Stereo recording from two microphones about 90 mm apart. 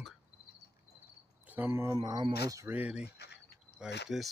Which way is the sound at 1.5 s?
25° right (ahead or behind).